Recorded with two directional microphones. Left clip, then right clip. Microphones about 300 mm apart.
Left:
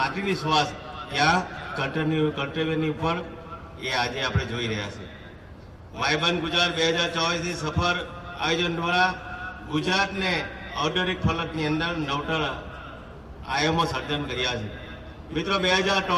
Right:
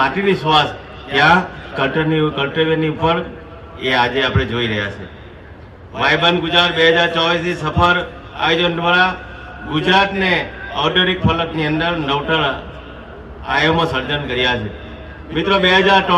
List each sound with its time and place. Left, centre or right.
1.1 s a man's voice: left
6.0 s a man's voice: left
13.5 s a man's voice: left